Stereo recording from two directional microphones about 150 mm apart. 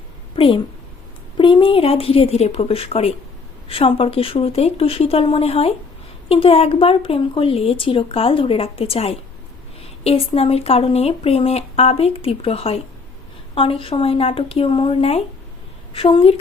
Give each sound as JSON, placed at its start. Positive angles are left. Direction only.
{"t": 0.3, "sound": "speech", "side_deg": 35}